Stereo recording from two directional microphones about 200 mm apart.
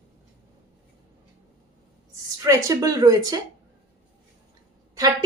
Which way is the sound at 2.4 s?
15° right (ahead or behind).